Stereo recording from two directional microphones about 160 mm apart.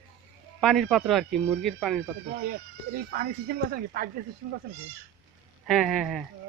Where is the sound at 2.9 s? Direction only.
65° right (ahead or behind).